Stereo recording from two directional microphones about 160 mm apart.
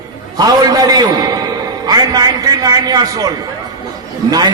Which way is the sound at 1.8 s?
25° right (ahead or behind).